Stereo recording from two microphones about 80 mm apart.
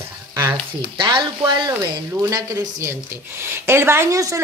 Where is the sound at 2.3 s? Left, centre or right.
Right.